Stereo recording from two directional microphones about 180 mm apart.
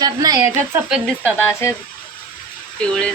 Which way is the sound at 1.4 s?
15° left (ahead or behind).